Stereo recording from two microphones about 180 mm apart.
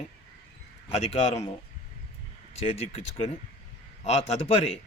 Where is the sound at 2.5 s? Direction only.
35° left (ahead or behind).